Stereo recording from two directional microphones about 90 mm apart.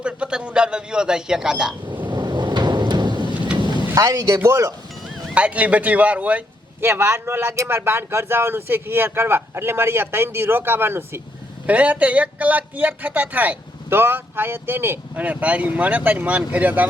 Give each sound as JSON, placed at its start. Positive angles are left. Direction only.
{"t": 0.0, "sound": "speech", "side_deg": -10}
{"t": 2.0, "sound": "thunder", "side_deg": -55}
{"t": 3.9, "sound": "speech", "side_deg": -40}
{"t": 5.3, "sound": "speech", "side_deg": -15}
{"t": 6.8, "sound": "speech", "side_deg": -25}